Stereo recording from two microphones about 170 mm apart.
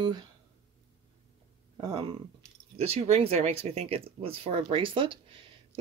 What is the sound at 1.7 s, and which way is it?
Speech, 25° right (ahead or behind).